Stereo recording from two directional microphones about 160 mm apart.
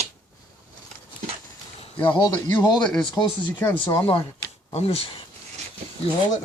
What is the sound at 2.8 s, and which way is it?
Speech, 5° left (ahead or behind).